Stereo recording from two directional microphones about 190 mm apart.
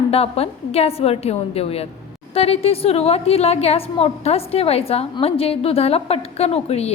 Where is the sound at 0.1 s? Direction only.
30° left (ahead or behind).